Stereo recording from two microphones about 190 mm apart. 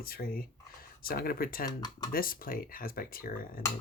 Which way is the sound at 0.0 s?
50° left (ahead or behind).